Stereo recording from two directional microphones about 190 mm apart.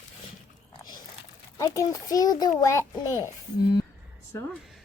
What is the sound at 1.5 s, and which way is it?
A child's voice, 15° left (ahead or behind).